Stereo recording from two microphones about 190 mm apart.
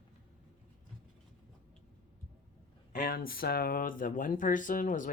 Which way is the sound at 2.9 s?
50° left (ahead or behind).